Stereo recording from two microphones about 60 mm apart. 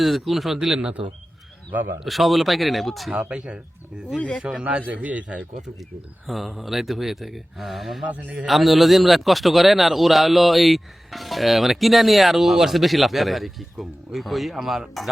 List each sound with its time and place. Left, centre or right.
0.0 s a man's voice: centre
0.8 s a man's voice: centre
2.0 s a man's voice: centre
3.2 s a man's voice: right
4.2 s speech: left
4.9 s a man's voice: right
6.2 s a man's voice: centre
8.0 s a man's voice: right
8.4 s a man's voice: centre